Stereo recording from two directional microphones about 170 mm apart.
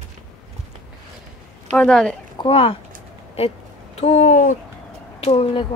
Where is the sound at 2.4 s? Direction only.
35° left (ahead or behind).